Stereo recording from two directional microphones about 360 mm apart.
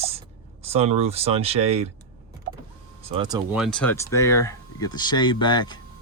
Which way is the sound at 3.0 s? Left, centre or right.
Centre.